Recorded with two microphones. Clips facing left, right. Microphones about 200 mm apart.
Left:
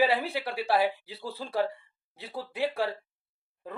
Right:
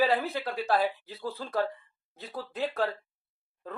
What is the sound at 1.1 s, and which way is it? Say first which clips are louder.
Speech: right 3 dB; 30° left (ahead or behind).